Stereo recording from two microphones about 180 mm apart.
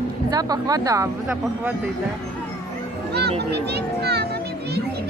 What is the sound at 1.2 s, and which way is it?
Speech, 10° right (ahead or behind).